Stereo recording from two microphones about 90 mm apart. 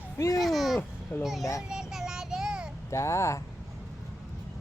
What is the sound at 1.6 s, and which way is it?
Child singing, 5° right (ahead or behind).